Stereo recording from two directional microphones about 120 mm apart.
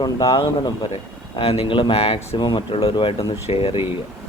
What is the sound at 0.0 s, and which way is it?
Speech, 40° left (ahead or behind).